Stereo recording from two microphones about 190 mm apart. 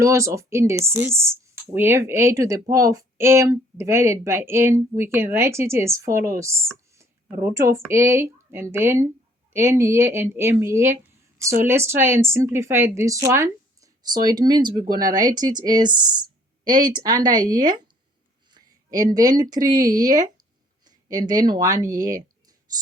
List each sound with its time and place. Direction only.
0.0 s speech: 15° right (ahead or behind)
16.6 s a woman's voice: 45° right (ahead or behind)
16.9 s speech: 20° right (ahead or behind)
18.5 s a sound: 20° right (ahead or behind)
19.4 s speech: 20° right (ahead or behind)